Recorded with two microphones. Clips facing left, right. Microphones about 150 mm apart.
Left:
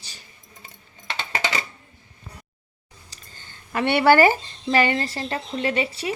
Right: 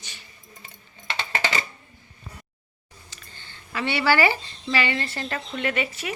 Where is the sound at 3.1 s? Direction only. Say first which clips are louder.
Even; 45° left (ahead or behind).